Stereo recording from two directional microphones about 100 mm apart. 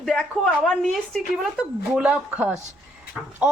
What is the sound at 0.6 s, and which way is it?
Speech, 5° left (ahead or behind).